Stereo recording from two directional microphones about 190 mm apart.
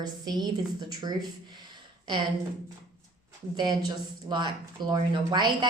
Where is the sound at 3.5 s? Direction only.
25° right (ahead or behind).